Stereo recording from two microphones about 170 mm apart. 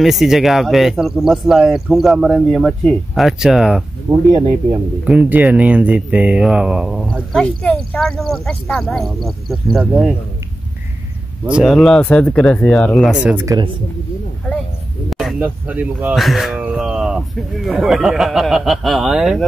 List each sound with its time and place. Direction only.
0.0 s speech: centre (ahead or behind)
4.3 s speech: 20° right (ahead or behind)
5.0 s speech: 10° right (ahead or behind)
11.4 s speech: 5° right (ahead or behind)
15.0 s speech: centre (ahead or behind)